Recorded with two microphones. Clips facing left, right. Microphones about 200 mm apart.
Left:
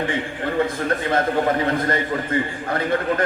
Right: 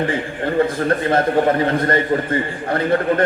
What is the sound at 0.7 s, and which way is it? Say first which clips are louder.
A man's voice: right 4 dB; 30° right (ahead or behind).